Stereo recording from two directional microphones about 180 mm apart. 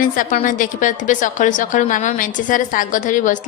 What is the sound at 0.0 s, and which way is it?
A woman's voice, 50° left (ahead or behind).